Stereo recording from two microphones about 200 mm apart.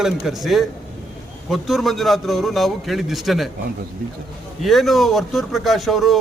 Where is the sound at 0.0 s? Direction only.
Centre (ahead or behind).